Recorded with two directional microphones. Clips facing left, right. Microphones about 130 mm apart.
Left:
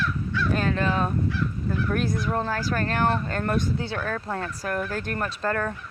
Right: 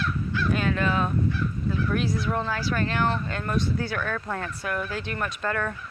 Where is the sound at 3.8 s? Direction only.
30° left (ahead or behind); by 5.2 s 45° left (ahead or behind).